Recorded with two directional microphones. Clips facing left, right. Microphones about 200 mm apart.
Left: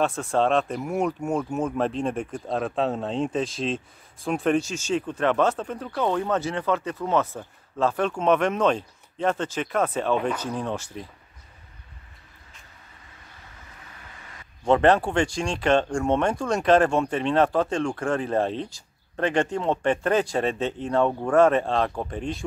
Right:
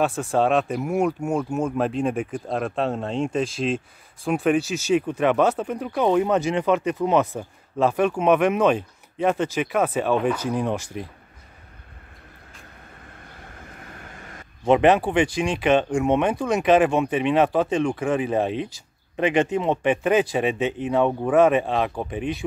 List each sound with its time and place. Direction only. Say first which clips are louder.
0.0 s speech: right 2 dB; 5° right (ahead or behind)
13.1 s vehicle: right 5 dB; 55° right (ahead or behind)
14.6 s speech: right 2 dB; 15° right (ahead or behind)
16.3 s speech: right 3 dB; 5° right (ahead or behind)
16.6 s speech: right 1 dB; 15° right (ahead or behind)